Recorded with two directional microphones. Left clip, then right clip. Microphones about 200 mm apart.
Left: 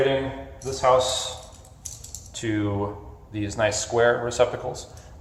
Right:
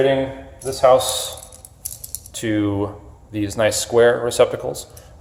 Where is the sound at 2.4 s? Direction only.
60° right (ahead or behind).